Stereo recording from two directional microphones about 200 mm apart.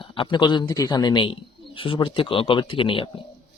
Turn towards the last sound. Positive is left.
turn(degrees=25)  # may be behind; listen again after turning